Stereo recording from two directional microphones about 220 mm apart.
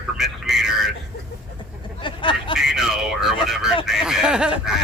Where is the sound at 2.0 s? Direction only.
20° left (ahead or behind).